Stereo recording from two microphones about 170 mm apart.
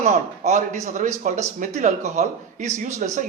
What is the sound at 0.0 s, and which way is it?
Speech, 45° right (ahead or behind).